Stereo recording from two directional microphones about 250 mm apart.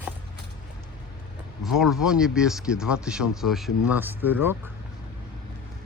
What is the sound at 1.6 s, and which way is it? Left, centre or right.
Speech, centre.